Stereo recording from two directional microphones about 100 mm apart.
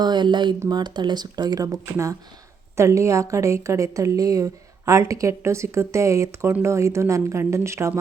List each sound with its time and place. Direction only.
0.0 s a woman's voice: 50° right (ahead or behind); by 7.9 s 30° right (ahead or behind)